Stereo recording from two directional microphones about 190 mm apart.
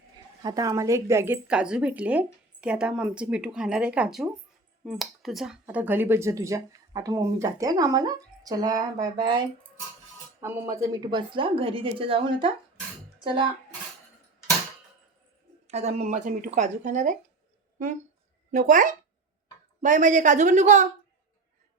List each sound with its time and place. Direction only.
0.4 s speech: 20° right (ahead or behind)
10.4 s a woman's voice: 10° right (ahead or behind); by 12.5 s 30° right (ahead or behind)
13.1 s a sound: 25° right (ahead or behind)
15.6 s speech: 35° right (ahead or behind)
18.5 s speech: 45° right (ahead or behind)